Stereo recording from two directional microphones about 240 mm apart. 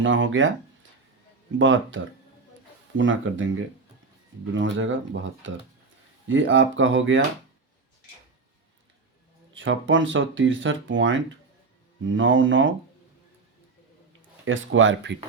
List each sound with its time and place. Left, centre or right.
0.0 s speech: right
1.5 s speech: right
3.0 s speech: right
4.5 s speech: right
9.6 s speech: right
14.4 s speech: right